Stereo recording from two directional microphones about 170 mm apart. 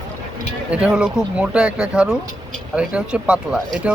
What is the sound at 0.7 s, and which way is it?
Speech, 5° right (ahead or behind).